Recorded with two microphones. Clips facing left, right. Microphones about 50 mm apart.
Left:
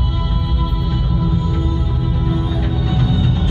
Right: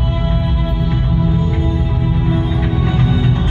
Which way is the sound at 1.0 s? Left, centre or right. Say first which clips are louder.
Right 2 dB; right.